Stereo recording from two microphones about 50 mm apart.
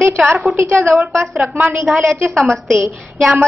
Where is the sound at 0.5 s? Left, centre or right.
Right.